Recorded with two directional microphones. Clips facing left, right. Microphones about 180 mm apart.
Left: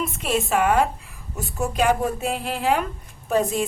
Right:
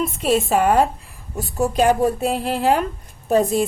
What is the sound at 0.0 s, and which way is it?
A woman's voice, 35° right (ahead or behind).